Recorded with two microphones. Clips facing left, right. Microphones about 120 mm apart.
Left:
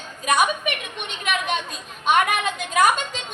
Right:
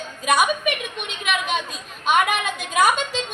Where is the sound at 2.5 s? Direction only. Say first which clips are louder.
Even; 5° right (ahead or behind).